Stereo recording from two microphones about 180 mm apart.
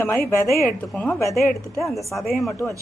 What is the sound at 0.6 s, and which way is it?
Speech, 5° left (ahead or behind).